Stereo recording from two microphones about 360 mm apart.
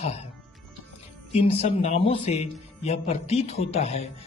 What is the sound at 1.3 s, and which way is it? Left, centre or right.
A man's voice, centre.